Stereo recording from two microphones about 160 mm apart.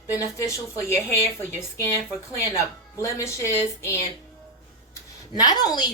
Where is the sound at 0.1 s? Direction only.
20° left (ahead or behind).